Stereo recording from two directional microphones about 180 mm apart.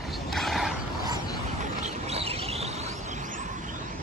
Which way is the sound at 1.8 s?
35° right (ahead or behind).